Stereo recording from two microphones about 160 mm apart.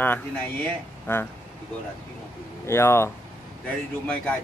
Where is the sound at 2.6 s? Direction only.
15° left (ahead or behind).